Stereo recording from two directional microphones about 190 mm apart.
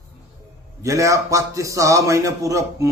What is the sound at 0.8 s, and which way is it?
Speech, 15° right (ahead or behind).